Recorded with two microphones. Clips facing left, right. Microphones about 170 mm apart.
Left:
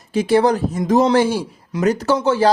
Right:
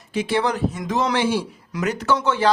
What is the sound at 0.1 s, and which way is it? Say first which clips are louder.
A man's voice: left 7 dB; 40° left (ahead or behind).